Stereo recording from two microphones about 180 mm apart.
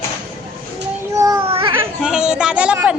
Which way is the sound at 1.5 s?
30° right (ahead or behind).